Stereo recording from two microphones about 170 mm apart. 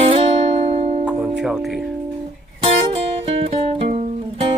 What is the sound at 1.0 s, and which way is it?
Speech, 5° right (ahead or behind).